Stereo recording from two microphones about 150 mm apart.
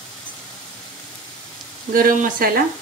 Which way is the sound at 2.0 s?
65° right (ahead or behind).